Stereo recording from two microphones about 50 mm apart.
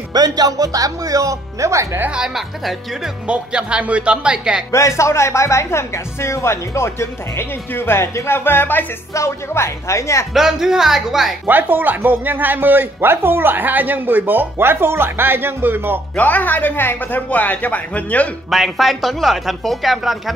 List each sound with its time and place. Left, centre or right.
1.2 s speech: right
2.0 s speech: centre
2.3 s speech: centre
3.3 s speech: right
4.7 s speech: left
8.5 s speech: left
9.1 s speech: left
10.3 s speech: centre
11.4 s speech: right
16.2 s speech: left
18.5 s speech: centre